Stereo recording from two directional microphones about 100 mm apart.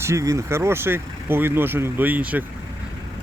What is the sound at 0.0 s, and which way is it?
Speech, 30° right (ahead or behind).